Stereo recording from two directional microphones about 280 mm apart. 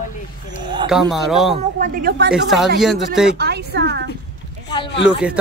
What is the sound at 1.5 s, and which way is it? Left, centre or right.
Speech, right.